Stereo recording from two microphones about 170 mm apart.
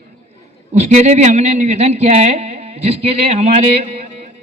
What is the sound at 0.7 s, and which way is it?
A man's voice, 45° right (ahead or behind).